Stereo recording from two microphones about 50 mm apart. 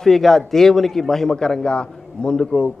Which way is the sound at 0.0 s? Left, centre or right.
Centre.